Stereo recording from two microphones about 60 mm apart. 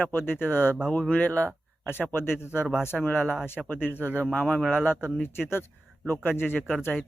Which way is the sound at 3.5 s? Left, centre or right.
Left.